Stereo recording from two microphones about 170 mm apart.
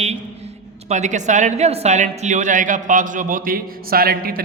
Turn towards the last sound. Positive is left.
turn(degrees=-60)  # may be behind; listen again after turning